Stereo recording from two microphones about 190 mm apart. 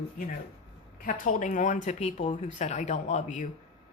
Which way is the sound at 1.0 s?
45° left (ahead or behind).